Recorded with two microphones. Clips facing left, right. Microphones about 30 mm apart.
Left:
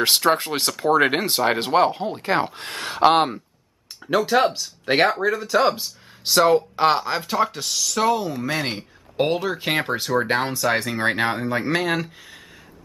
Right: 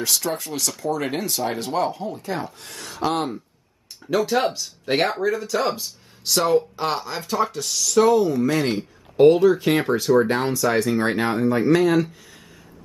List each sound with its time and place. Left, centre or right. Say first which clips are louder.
0.0 s speech: left 6 dB; left
4.2 s speech: left 2 dB; centre
4.9 s speech: left 2 dB; left